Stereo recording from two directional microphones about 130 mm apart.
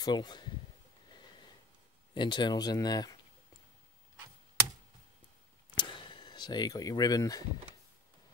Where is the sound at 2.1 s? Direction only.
35° left (ahead or behind).